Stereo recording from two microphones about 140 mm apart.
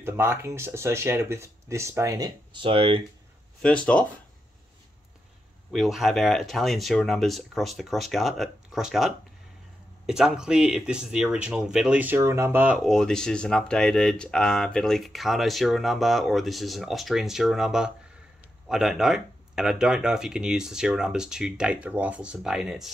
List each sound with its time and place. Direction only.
0.0 s speech: 15° right (ahead or behind); by 3.0 s 40° right (ahead or behind)
3.6 s speech: 10° left (ahead or behind)
5.7 s speech: centre (ahead or behind)
12.8 s speech: 5° left (ahead or behind)